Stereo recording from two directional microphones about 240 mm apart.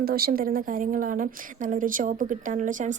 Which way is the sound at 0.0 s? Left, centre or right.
Right.